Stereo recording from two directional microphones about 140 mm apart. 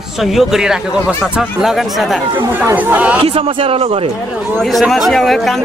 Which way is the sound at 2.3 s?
15° right (ahead or behind).